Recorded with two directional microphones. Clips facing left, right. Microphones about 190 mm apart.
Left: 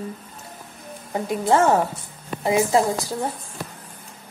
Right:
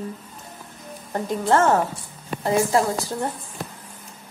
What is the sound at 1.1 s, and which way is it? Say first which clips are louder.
A woman's voice: left 1 dB; 10° left (ahead or behind).